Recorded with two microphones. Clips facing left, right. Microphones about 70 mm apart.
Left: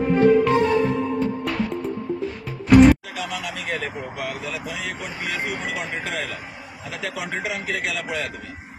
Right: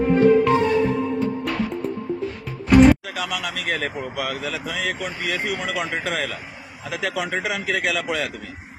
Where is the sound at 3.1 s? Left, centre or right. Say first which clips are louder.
Right 2 dB; right.